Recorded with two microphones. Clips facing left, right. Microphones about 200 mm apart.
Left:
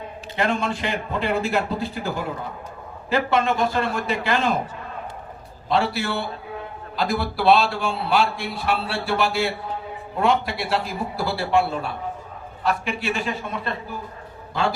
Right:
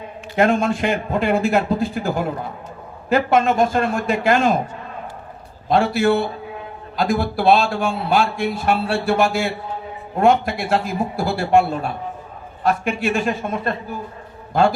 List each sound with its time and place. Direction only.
0.3 s a man's voice: 50° right (ahead or behind)
5.6 s a man's voice: 50° right (ahead or behind)